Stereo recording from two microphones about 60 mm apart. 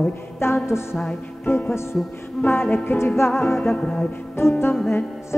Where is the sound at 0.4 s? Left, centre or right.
Left.